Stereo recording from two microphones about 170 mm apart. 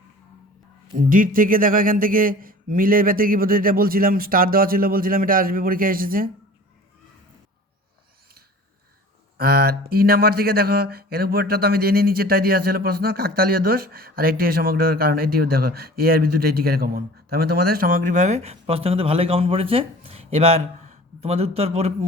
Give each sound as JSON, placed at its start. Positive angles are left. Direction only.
{"t": 0.9, "sound": "speech", "side_deg": -55}
{"t": 9.4, "sound": "speech", "side_deg": -65}